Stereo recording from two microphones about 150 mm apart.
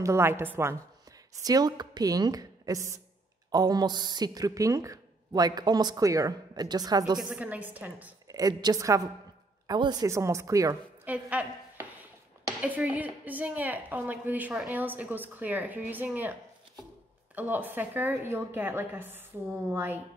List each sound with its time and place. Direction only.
0.0 s a woman's voice: 20° right (ahead or behind)
7.2 s a woman's voice: 5° right (ahead or behind)
8.3 s speech: 25° right (ahead or behind)
11.1 s a woman's voice: 10° right (ahead or behind)
17.4 s a woman's voice: 10° right (ahead or behind)